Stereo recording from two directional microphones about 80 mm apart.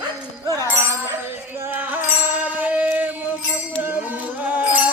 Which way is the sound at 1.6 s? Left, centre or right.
Right.